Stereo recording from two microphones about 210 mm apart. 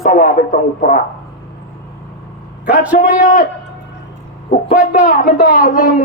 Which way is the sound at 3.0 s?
40° left (ahead or behind).